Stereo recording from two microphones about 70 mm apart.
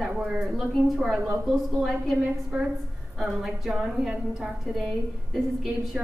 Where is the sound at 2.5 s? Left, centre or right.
Centre.